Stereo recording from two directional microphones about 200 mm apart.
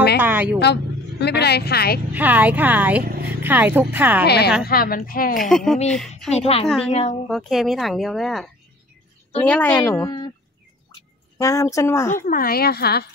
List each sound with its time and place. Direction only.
0.2 s a woman's voice: 10° right (ahead or behind)
1.2 s a woman's voice: 55° left (ahead or behind)
2.1 s a woman's voice: 10° right (ahead or behind)
3.0 s vehicle: 45° right (ahead or behind)
3.3 s speech: 10° right (ahead or behind)
4.6 s a woman's voice: 45° left (ahead or behind)
5.4 s speech: centre (ahead or behind)
6.9 s speech: 35° left (ahead or behind)
7.2 s speech: centre (ahead or behind)
9.9 s speech: 20° left (ahead or behind)
11.3 s speech: 15° left (ahead or behind)
12.3 s a woman's voice: 45° left (ahead or behind)